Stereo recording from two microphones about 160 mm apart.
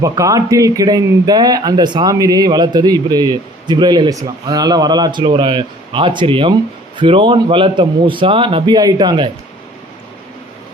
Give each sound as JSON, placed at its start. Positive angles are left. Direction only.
{"t": 0.0, "sound": "speech", "side_deg": -20}